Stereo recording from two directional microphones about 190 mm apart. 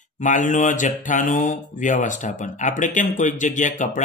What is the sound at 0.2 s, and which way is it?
Speech, 40° left (ahead or behind).